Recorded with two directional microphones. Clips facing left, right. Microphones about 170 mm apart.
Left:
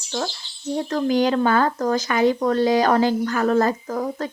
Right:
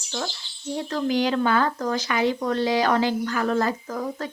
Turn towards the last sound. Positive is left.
turn(degrees=40)  # may be behind; listen again after turning